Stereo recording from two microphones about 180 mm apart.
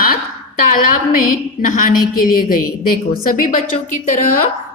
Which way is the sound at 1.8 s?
50° left (ahead or behind).